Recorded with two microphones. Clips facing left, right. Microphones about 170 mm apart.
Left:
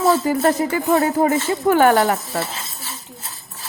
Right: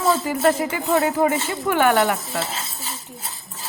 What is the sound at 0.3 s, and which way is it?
Speech, 40° left (ahead or behind).